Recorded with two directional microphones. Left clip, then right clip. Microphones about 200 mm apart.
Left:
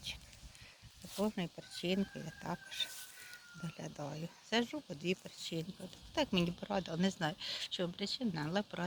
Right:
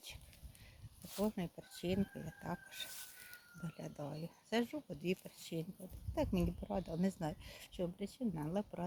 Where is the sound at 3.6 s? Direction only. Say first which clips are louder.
Left 2 dB; 5° left (ahead or behind).